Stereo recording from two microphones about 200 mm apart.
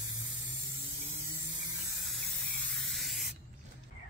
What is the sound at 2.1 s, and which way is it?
Spray, centre (ahead or behind).